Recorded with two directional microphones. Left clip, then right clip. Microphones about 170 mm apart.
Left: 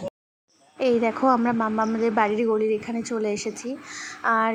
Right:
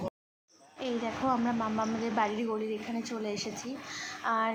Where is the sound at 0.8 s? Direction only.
40° left (ahead or behind).